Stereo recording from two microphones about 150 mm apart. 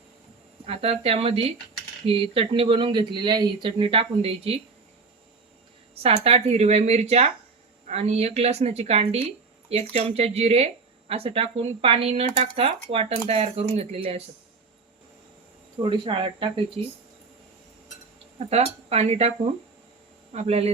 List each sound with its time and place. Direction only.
0.6 s speech: 40° right (ahead or behind)
5.9 s speech: 40° right (ahead or behind)
15.8 s speech: 35° right (ahead or behind)
18.3 s speech: 40° right (ahead or behind)
20.3 s speech: 45° right (ahead or behind)